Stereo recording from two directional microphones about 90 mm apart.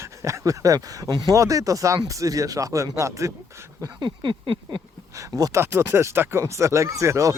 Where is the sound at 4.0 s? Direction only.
60° right (ahead or behind).